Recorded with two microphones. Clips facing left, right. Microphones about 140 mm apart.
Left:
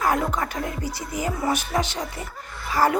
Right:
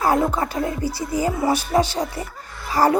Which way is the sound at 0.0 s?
30° right (ahead or behind).